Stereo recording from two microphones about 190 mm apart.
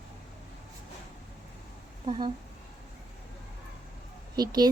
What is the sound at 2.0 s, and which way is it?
Speech, 25° right (ahead or behind).